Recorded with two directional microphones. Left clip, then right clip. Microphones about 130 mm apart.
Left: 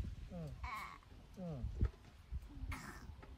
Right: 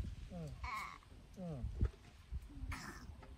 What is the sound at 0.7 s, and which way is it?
Sheep, 5° right (ahead or behind).